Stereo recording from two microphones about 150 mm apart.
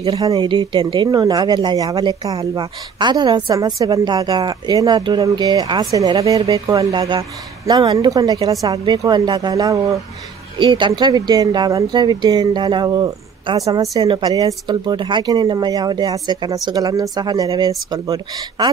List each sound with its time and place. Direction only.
0.2 s a woman's voice: 25° right (ahead or behind)